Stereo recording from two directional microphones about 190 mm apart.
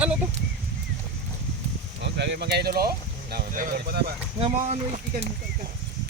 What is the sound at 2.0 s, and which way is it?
Speech, 65° right (ahead or behind).